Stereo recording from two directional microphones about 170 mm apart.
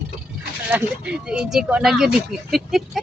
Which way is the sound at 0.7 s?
5° right (ahead or behind).